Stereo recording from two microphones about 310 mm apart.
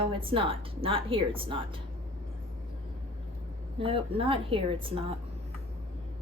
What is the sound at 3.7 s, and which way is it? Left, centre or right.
Speech, centre.